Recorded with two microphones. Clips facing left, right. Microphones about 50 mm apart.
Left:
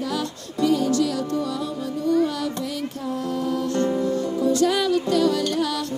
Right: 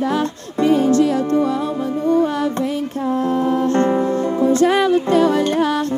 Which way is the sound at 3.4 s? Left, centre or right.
Right.